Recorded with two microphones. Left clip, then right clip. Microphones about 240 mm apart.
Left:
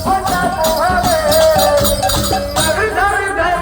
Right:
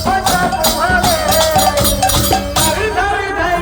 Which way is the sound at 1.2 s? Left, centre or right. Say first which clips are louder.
Left 2 dB; right.